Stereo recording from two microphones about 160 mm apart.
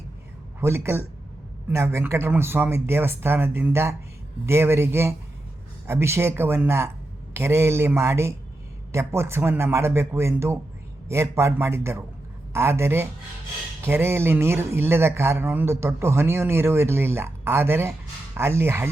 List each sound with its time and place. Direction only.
0.6 s a man's voice: 15° right (ahead or behind)